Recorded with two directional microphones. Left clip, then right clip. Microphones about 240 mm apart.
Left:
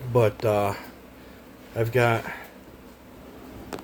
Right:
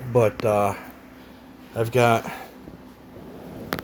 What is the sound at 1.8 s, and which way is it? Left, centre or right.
Speech, centre.